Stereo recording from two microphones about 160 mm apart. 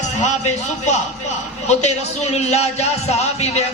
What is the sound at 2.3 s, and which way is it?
Speech, 45° left (ahead or behind).